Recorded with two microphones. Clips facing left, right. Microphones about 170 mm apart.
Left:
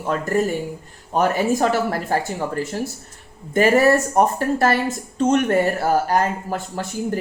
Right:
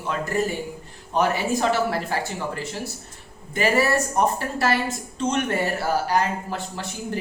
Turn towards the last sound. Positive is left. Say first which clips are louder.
# left 5 dB
turn(degrees=45)  # may be behind; listen again after turning